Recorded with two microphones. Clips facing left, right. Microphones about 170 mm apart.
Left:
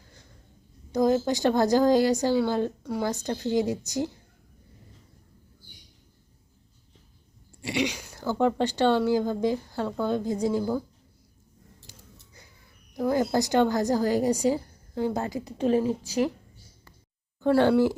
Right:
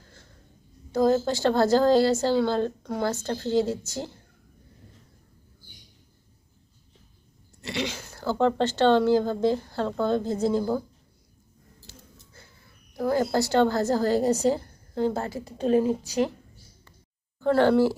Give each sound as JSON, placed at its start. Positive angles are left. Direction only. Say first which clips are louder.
{"t": 0.9, "sound": "speech", "louder": "right 1 dB", "side_deg": 15}
{"t": 7.6, "sound": "speech", "louder": "left 3 dB", "side_deg": 15}
{"t": 11.9, "sound": "a sound", "louder": "right 6 dB", "side_deg": 15}
{"t": 12.9, "sound": "speech", "louder": "even", "side_deg": 15}
{"t": 17.4, "sound": "speech", "louder": "even", "side_deg": 15}